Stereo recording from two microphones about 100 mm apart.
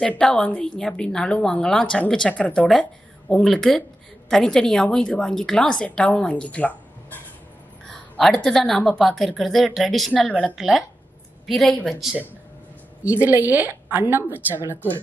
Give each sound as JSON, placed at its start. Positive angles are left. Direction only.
{"t": 0.0, "sound": "a woman's voice", "side_deg": 5}
{"t": 7.8, "sound": "a woman's voice", "side_deg": 5}
{"t": 13.0, "sound": "a woman's voice", "side_deg": -15}